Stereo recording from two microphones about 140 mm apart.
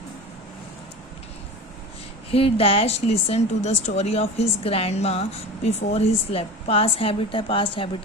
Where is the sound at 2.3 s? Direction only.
45° left (ahead or behind).